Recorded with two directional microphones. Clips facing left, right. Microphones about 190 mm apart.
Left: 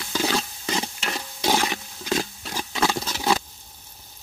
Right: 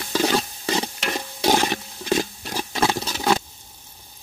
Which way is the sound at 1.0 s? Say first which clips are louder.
Right 5 dB; 15° right (ahead or behind).